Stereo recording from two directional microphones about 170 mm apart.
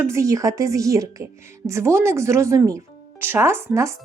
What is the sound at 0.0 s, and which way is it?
Speech, 15° right (ahead or behind).